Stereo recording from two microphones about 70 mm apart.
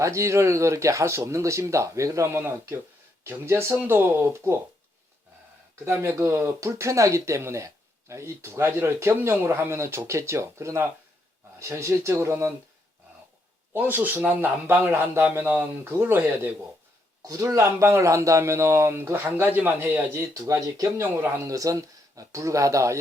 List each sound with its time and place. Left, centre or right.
0.0 s speech: right
5.8 s speech: right
13.7 s speech: right
17.2 s speech: right
20.2 s speech: right
21.0 s speech: right